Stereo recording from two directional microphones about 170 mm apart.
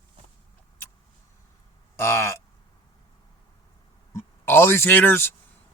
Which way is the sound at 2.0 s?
15° left (ahead or behind).